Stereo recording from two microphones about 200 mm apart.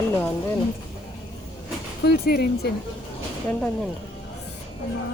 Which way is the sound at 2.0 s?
50° left (ahead or behind).